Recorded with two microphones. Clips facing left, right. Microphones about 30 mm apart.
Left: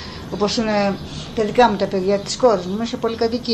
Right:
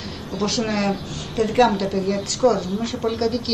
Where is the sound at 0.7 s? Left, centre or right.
Centre.